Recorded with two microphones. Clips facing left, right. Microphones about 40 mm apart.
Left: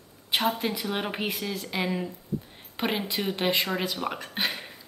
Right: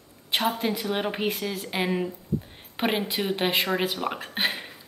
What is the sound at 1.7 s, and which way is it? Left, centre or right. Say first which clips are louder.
A woman's voice: right 3 dB; right.